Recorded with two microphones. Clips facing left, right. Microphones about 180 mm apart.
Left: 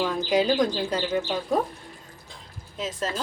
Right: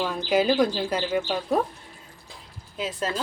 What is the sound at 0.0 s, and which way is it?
Speech, 5° right (ahead or behind).